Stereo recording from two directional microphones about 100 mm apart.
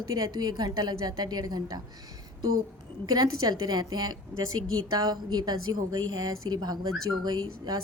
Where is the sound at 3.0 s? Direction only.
40° right (ahead or behind).